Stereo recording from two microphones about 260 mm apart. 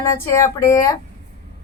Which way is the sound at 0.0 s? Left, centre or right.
Centre.